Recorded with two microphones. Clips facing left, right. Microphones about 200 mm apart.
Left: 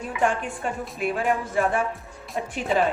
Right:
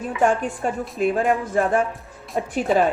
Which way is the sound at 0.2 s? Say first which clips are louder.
Right 4 dB; 40° right (ahead or behind).